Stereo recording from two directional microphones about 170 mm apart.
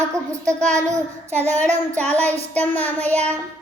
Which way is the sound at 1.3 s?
40° right (ahead or behind).